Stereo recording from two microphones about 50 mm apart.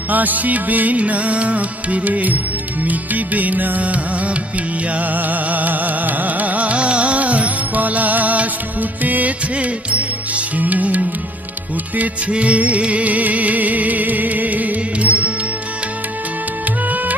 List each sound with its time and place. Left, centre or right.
0.1 s music: right